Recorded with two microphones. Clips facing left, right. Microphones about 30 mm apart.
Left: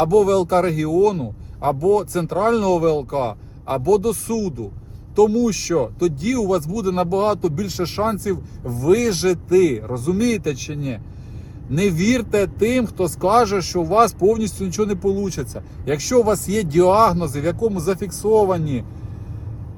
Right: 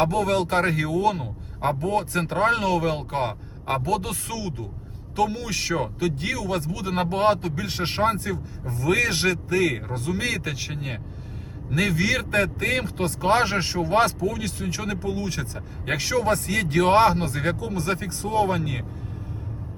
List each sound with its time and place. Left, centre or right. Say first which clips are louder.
0.1 s speech: left 7 dB; right
1.1 s a man's voice: left 5 dB; right
1.8 s speech: left 7 dB; right
3.8 s speech: left 9 dB; right